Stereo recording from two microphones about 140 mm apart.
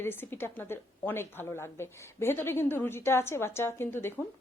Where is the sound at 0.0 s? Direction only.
15° left (ahead or behind).